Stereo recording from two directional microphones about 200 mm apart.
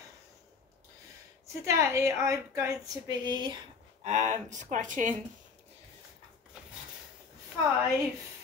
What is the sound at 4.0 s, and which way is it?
Speech, 35° right (ahead or behind).